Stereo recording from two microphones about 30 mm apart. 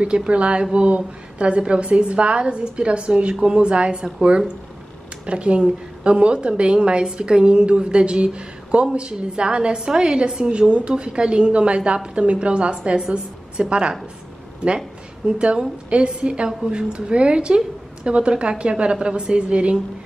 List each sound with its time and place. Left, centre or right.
0.0 s a woman's voice: right
5.2 s a woman's voice: right